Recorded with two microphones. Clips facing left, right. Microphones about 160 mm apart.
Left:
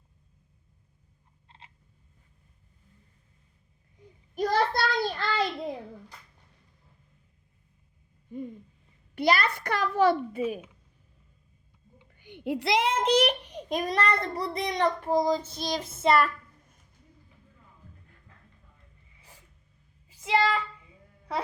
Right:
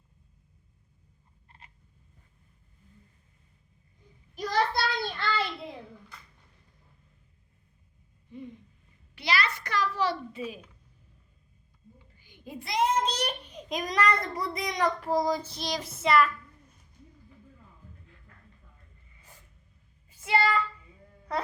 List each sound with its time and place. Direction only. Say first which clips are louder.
1.5 s frog: left 2 dB; 25° left (ahead or behind)
4.4 s child singing: left 2 dB; 50° left (ahead or behind)
9.1 s a sound: left 5 dB; 50° left (ahead or behind)
10.3 s a child's voice: left 7 dB; 50° left (ahead or behind)
12.1 s a child's voice: left 11 dB; 65° left (ahead or behind)
13.7 s child singing: even; 30° left (ahead or behind)
15.4 s a child's voice: left 2 dB; 50° left (ahead or behind)
16.0 s child singing: left 1 dB; 30° left (ahead or behind)
20.2 s speech: left 1 dB; 15° left (ahead or behind)